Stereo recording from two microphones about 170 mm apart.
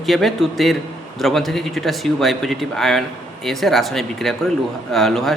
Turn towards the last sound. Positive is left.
turn(degrees=0)  # may be behind; listen again after turning